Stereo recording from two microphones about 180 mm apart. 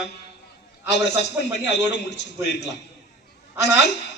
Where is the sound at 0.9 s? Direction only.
70° left (ahead or behind).